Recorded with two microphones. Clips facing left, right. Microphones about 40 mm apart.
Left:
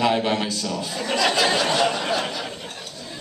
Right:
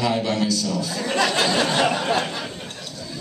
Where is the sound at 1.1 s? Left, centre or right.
Right.